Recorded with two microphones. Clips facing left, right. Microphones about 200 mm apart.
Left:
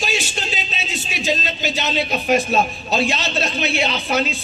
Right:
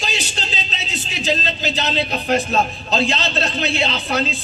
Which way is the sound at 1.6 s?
20° left (ahead or behind).